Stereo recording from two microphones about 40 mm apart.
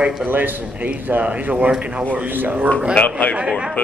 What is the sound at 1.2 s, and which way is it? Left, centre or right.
Speech, right.